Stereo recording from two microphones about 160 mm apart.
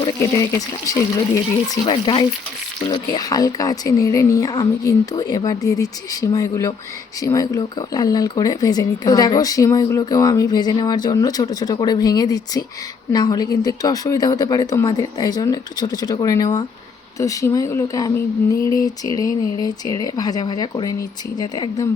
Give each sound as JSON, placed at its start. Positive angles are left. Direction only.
{"t": 0.9, "sound": "speech", "side_deg": 20}